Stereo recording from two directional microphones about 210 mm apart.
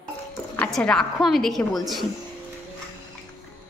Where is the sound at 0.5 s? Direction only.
5° left (ahead or behind).